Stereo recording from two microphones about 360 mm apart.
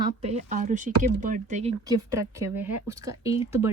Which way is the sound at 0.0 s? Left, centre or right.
Centre.